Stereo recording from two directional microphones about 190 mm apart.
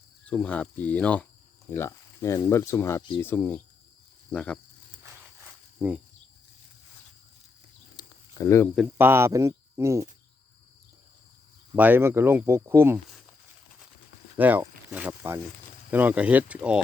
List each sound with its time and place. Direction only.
0.3 s speech: 5° left (ahead or behind)
5.8 s speech: 10° right (ahead or behind)
7.9 s snake: 20° left (ahead or behind)
8.7 s speech: 5° right (ahead or behind)
11.7 s speech: 10° right (ahead or behind)
14.3 s speech: 10° right (ahead or behind)